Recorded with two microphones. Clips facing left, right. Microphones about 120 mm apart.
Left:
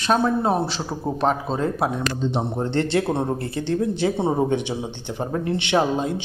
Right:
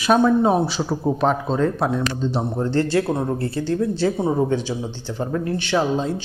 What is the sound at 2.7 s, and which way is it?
Speech, 25° left (ahead or behind).